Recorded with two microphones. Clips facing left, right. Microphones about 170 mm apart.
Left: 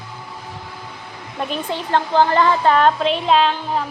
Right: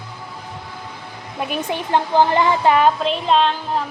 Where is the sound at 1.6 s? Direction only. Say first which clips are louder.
Right 1 dB; 15° right (ahead or behind).